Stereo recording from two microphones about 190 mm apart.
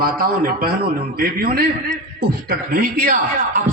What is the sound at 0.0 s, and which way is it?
A man's voice, 50° right (ahead or behind).